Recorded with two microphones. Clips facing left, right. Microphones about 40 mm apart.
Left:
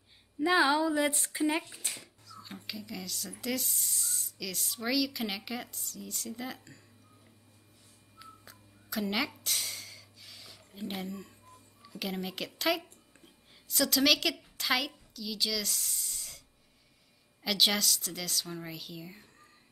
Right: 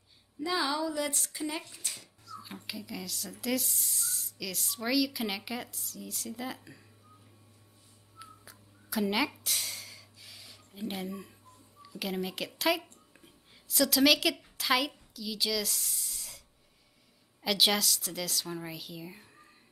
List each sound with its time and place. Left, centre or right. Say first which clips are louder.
0.4 s speech: left 5 dB; left
2.2 s speech: right 3 dB; centre
8.2 s whistling: right 1 dB; centre
11.1 s speech: right 1 dB; centre
17.4 s speech: right 1 dB; centre